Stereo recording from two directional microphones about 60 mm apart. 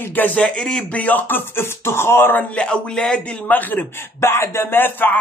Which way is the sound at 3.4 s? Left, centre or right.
Left.